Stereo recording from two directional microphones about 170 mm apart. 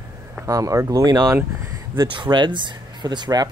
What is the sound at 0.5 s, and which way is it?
Speech, 20° right (ahead or behind).